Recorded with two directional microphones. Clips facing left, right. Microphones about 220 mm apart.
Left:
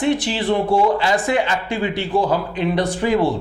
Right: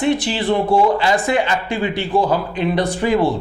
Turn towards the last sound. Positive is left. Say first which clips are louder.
# right 1 dB
turn(degrees=-30)  # may be behind; listen again after turning